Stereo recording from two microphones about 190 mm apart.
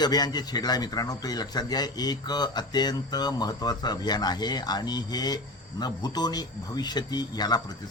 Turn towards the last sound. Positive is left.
turn(degrees=20)  # may be behind; listen again after turning